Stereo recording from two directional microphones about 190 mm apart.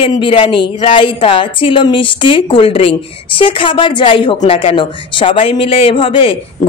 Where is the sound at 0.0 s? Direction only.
30° left (ahead or behind).